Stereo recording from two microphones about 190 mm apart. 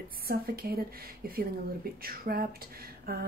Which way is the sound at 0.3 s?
50° right (ahead or behind).